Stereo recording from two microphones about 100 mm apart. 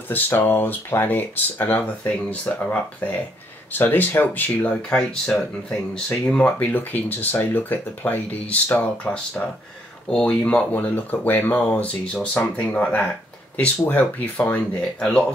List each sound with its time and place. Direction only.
0.1 s speech: 20° left (ahead or behind)